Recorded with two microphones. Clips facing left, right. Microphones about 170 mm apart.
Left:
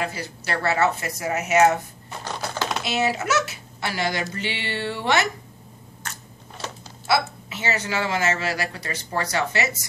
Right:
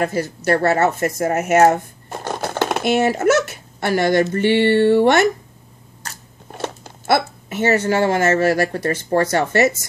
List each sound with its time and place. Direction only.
0.0 s speech: 45° right (ahead or behind)
6.5 s speech: 55° right (ahead or behind)